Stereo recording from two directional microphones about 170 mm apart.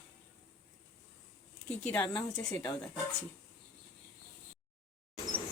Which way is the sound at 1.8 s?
10° left (ahead or behind).